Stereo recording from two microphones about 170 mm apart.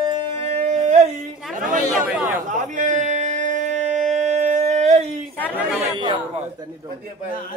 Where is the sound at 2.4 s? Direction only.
45° right (ahead or behind).